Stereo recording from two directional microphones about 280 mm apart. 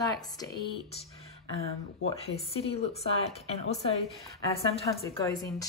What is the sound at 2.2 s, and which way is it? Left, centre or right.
Speech, left.